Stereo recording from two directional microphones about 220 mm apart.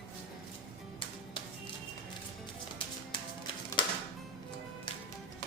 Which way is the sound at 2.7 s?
25° left (ahead or behind).